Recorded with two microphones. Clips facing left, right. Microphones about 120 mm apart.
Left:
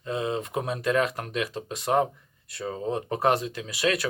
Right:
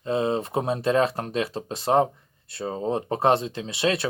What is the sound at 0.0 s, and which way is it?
Speech, 30° right (ahead or behind).